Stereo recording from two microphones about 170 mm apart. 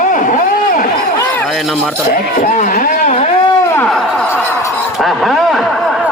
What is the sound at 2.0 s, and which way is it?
Speech, 50° left (ahead or behind).